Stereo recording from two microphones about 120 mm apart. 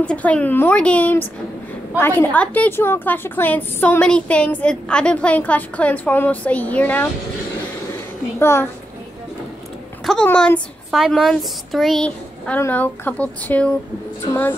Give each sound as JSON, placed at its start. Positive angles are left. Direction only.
{"t": 0.0, "sound": "a woman's voice", "side_deg": 10}
{"t": 8.4, "sound": "a child's voice", "side_deg": 20}
{"t": 10.2, "sound": "a woman's voice", "side_deg": 10}
{"t": 10.9, "sound": "a woman's voice", "side_deg": 0}
{"t": 12.5, "sound": "a woman's voice", "side_deg": 15}